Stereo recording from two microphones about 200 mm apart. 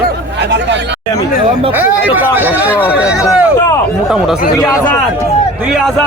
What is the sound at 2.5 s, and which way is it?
Speech, 10° left (ahead or behind).